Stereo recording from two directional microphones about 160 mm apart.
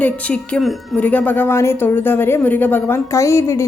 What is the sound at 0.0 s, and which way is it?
A woman's voice, 5° left (ahead or behind).